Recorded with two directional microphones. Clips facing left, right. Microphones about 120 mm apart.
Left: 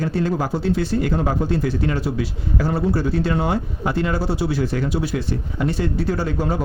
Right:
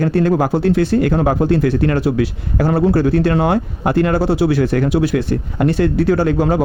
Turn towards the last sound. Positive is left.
turn(degrees=-85)